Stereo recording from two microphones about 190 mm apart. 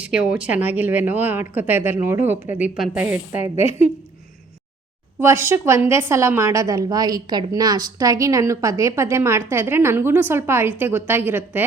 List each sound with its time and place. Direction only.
0.0 s a woman's voice: 5° right (ahead or behind)
5.2 s a woman's voice: 15° right (ahead or behind)